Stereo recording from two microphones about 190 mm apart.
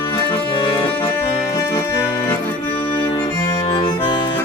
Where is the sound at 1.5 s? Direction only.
15° left (ahead or behind).